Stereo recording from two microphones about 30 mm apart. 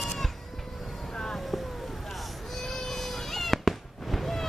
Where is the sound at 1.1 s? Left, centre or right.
Left.